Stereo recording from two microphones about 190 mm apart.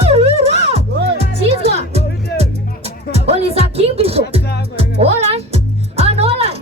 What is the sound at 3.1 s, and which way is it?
Music, 35° right (ahead or behind).